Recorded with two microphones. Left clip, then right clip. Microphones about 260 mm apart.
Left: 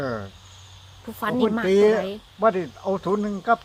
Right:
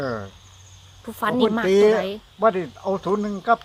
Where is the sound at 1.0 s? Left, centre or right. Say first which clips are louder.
Right 3 dB; centre.